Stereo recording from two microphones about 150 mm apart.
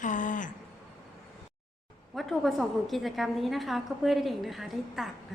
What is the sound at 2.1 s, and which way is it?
A woman's voice, centre (ahead or behind).